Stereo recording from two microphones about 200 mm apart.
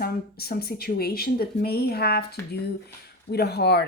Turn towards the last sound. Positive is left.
turn(degrees=55)  # may be behind; listen again after turning